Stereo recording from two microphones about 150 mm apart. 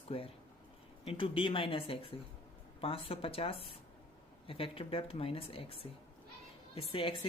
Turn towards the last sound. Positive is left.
turn(degrees=40)  # may be behind; listen again after turning